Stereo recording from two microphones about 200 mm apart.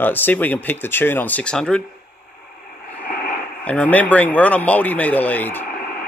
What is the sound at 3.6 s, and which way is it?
Speech, 5° left (ahead or behind).